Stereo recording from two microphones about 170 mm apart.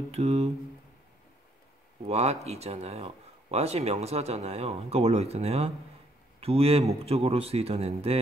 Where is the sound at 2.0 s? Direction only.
40° right (ahead or behind).